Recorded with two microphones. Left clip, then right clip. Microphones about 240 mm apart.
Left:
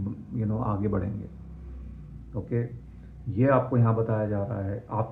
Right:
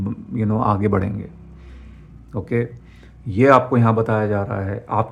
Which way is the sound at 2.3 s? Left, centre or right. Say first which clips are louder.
Right 9 dB; right.